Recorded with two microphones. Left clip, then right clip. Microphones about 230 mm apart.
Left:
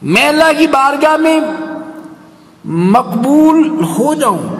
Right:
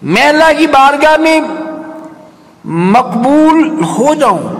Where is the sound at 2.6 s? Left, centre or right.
Left.